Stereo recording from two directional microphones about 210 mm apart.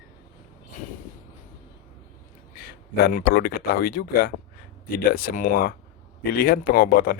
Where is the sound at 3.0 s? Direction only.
45° left (ahead or behind).